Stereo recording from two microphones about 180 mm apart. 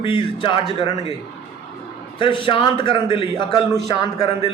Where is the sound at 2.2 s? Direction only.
30° left (ahead or behind).